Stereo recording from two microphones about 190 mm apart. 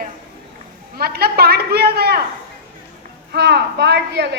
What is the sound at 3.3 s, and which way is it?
A woman's voice, 60° right (ahead or behind).